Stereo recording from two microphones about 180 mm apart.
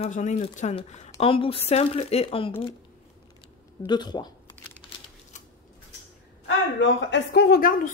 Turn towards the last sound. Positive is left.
turn(degrees=55)  # may be behind; listen again after turning